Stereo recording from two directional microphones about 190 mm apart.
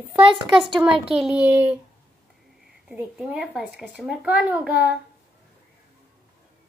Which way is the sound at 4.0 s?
5° right (ahead or behind).